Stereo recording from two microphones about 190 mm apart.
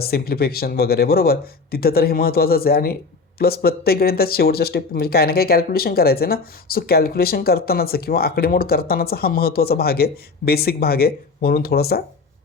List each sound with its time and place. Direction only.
0.0 s speech: 55° left (ahead or behind)